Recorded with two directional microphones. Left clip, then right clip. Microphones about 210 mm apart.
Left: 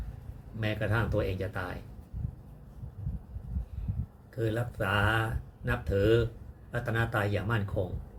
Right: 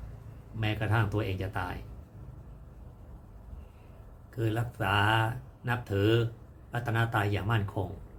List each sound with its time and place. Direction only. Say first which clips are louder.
0.6 s speech: even; 15° right (ahead or behind)
4.4 s speech: left 1 dB; 15° right (ahead or behind)